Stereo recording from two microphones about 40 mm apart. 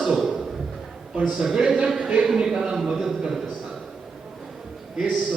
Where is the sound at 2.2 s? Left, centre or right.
Centre.